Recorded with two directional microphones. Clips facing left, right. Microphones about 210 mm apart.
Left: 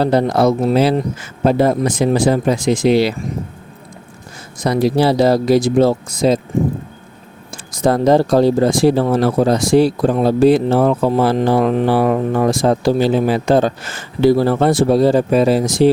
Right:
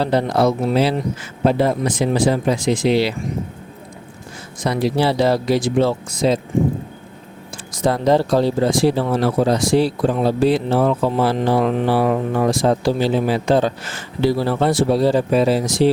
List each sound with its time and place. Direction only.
0.0 s speech: 45° left (ahead or behind)
4.6 s speech: 40° left (ahead or behind)
7.5 s speech: 45° left (ahead or behind)